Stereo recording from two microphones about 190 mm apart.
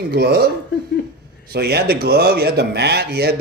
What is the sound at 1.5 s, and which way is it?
A man's voice, 55° right (ahead or behind).